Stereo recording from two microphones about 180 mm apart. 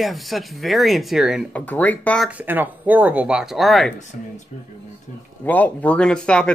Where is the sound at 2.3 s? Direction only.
10° right (ahead or behind).